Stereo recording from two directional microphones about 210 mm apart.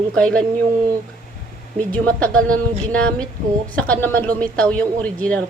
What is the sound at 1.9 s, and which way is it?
A woman's voice, 5° left (ahead or behind).